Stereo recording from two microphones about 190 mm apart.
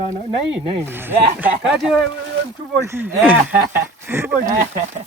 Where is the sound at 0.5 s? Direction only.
10° right (ahead or behind).